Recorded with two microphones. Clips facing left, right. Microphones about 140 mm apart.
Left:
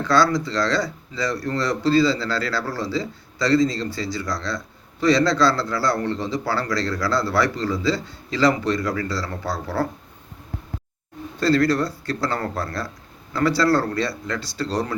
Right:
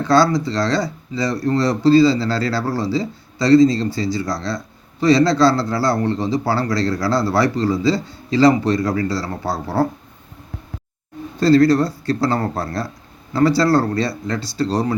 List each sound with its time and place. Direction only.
0.3 s speech: 35° right (ahead or behind)
11.3 s speech: 35° right (ahead or behind)